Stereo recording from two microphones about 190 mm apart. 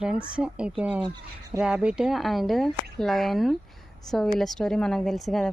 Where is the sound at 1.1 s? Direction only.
20° right (ahead or behind).